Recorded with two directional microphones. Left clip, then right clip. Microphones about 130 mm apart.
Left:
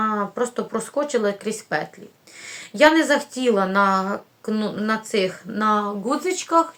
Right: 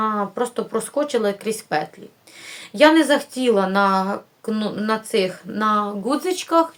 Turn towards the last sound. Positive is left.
turn(degrees=-30)  # may be behind; listen again after turning